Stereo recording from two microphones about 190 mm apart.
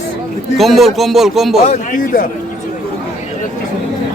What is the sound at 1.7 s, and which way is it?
Speech, 45° left (ahead or behind).